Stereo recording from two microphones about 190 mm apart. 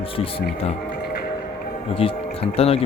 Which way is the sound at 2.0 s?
30° left (ahead or behind).